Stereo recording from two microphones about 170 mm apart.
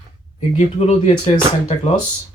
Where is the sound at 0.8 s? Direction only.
40° left (ahead or behind).